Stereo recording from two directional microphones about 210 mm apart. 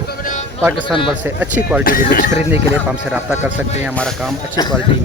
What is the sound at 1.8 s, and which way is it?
Speech, 40° left (ahead or behind).